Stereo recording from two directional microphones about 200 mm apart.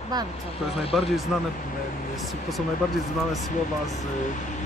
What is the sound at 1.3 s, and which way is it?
Speech, centre (ahead or behind).